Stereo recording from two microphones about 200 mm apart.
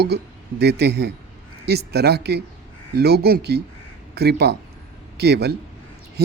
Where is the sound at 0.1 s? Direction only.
55° right (ahead or behind).